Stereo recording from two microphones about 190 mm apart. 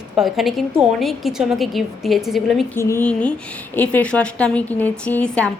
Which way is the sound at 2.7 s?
15° left (ahead or behind).